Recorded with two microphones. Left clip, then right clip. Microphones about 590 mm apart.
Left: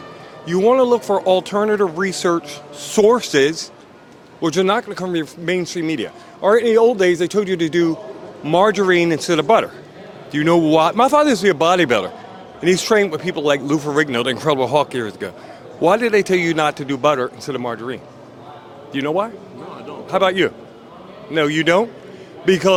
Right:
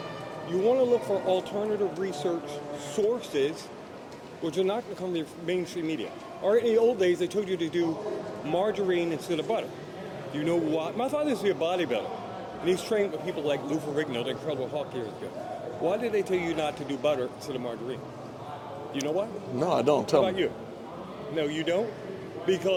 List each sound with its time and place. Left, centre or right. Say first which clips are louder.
0.5 s speech: left 10 dB; left
20.2 s speech: left 11 dB; left